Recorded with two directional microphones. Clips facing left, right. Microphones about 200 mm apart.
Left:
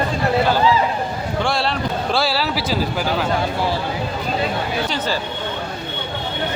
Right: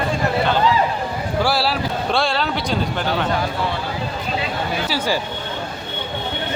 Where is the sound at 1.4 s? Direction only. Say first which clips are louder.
Right 1 dB; 5° right (ahead or behind).